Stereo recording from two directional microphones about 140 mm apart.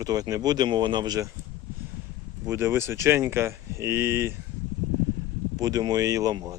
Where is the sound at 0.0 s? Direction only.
25° right (ahead or behind).